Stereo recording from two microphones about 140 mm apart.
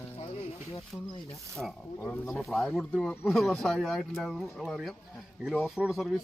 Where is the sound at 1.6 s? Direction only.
Centre (ahead or behind).